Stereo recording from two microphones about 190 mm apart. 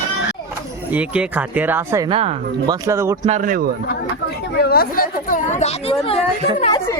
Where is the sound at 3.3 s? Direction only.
40° right (ahead or behind).